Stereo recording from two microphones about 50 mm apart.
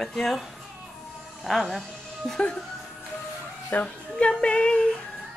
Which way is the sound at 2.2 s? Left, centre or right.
Centre.